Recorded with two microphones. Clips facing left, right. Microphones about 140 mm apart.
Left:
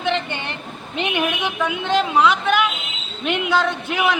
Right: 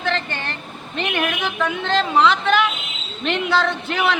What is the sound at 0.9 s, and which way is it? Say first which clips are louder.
A woman's voice: left 1 dB; 15° left (ahead or behind).